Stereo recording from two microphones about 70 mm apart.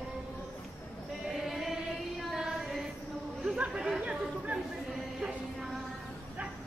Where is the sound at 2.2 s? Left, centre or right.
Centre.